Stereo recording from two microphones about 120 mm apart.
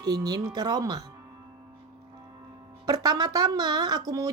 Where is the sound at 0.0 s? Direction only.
35° right (ahead or behind).